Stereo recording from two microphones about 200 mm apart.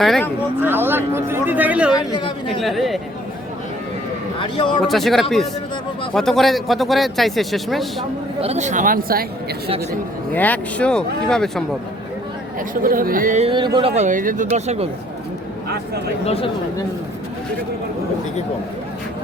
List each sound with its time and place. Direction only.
0.0 s speech: centre (ahead or behind)
0.6 s speech: 10° right (ahead or behind)
2.0 s speech: 25° left (ahead or behind)
2.6 s speech: centre (ahead or behind)
4.4 s speech: 25° left (ahead or behind)
4.8 s speech: centre (ahead or behind)
8.4 s speech: 35° right (ahead or behind)
10.3 s speech: 10° left (ahead or behind)
12.5 s speech: 45° right (ahead or behind)
16.2 s speech: 30° left (ahead or behind)